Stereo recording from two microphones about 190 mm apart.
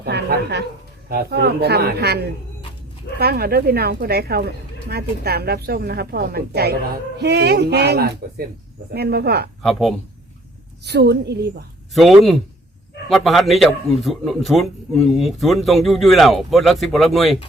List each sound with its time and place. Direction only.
0.0 s a sound: 60° right (ahead or behind)
1.1 s speech: 60° right (ahead or behind)
9.6 s a man's voice: centre (ahead or behind)
10.8 s speech: 65° right (ahead or behind)
11.9 s a man's voice: centre (ahead or behind)